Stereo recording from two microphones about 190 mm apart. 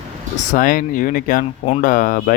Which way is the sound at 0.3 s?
45° left (ahead or behind).